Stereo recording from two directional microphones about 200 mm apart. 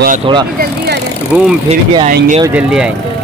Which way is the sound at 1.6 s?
30° right (ahead or behind).